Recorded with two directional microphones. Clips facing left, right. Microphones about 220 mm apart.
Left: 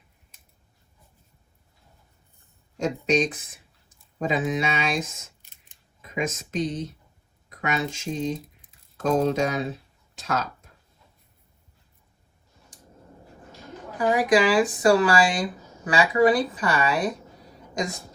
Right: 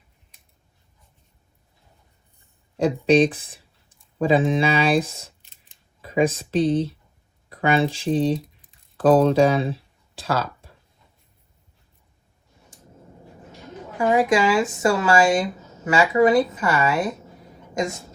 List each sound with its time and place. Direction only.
2.7 s speech: 30° right (ahead or behind)
14.0 s speech: 25° right (ahead or behind)